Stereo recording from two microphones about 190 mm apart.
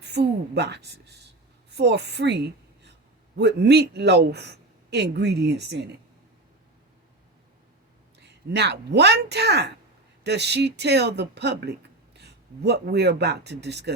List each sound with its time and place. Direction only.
0.0 s a woman's voice: 60° right (ahead or behind)
8.2 s a man's voice: 60° right (ahead or behind)